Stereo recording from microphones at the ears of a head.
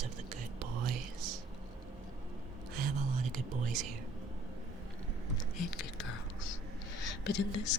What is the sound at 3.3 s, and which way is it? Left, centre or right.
Speech, right.